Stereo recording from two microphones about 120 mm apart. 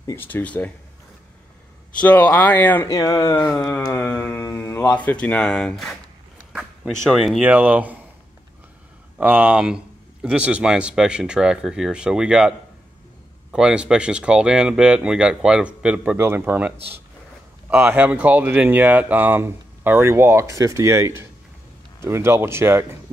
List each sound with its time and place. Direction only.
0.0 s speech: 20° left (ahead or behind)
2.0 s speech: 15° left (ahead or behind)
2.9 s speech: 25° left (ahead or behind)
3.9 s speech: 15° left (ahead or behind)
4.4 s mantra: 20° left (ahead or behind)
4.9 s speech: 10° left (ahead or behind)
7.0 s speech: centre (ahead or behind)
7.4 s speech: 15° right (ahead or behind)
9.2 s speech: 10° right (ahead or behind)